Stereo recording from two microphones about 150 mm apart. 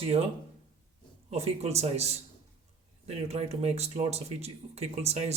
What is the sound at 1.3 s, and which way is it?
Speech, 45° right (ahead or behind).